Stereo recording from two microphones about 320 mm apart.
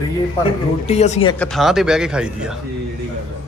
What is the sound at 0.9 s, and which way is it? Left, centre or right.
Speech, left.